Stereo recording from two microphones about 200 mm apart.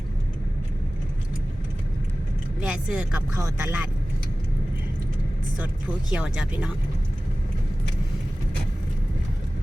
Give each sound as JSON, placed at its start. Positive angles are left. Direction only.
{"t": 2.6, "sound": "speech", "side_deg": -5}
{"t": 6.1, "sound": "speech", "side_deg": -5}